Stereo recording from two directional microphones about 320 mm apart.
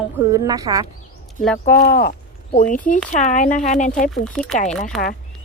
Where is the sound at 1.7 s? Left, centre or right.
Left.